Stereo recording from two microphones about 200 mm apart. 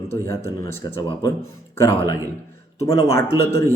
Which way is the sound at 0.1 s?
15° left (ahead or behind).